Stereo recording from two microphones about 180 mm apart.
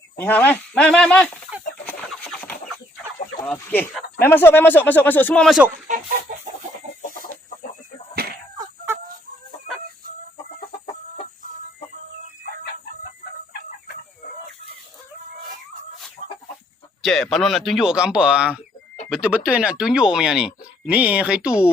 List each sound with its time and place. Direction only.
0.2 s speech: 10° left (ahead or behind)
3.4 s speech: 10° left (ahead or behind)
6.3 s chicken: 50° right (ahead or behind)
8.1 s a sound: 55° right (ahead or behind)
8.5 s chicken: 20° right (ahead or behind)
13.5 s chicken: 60° left (ahead or behind)
17.0 s speech: centre (ahead or behind)